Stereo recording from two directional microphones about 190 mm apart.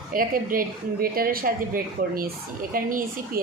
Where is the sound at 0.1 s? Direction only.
50° right (ahead or behind).